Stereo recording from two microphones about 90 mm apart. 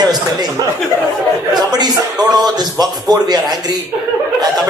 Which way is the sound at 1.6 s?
50° right (ahead or behind).